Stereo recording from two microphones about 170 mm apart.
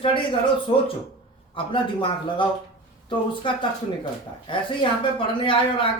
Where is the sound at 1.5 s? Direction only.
30° left (ahead or behind).